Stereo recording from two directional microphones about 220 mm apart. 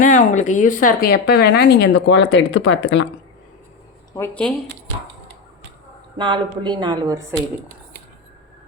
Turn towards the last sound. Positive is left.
turn(degrees=-15)  # may be behind; listen again after turning